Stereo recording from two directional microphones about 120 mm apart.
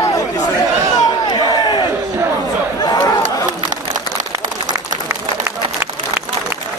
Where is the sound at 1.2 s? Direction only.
35° left (ahead or behind).